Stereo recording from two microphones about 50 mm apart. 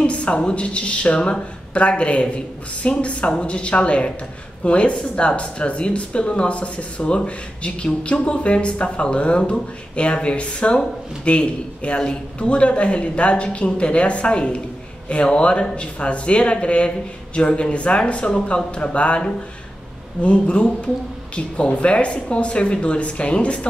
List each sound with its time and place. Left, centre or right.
0.0 s speech: left